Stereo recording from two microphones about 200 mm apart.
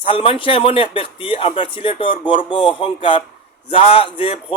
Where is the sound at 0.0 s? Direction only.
25° left (ahead or behind).